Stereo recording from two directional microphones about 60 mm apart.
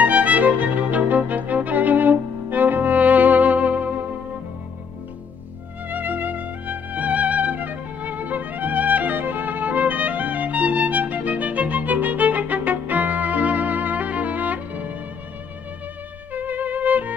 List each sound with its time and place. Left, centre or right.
0.0 s music: right
5.9 s music: right
16.3 s music: right